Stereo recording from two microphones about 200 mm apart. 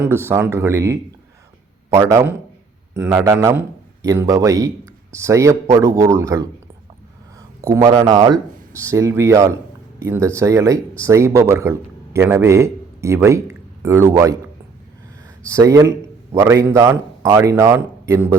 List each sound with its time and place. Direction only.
0.0 s speech: 10° right (ahead or behind)
7.7 s a man's voice: 15° right (ahead or behind)
15.4 s speech: 15° right (ahead or behind)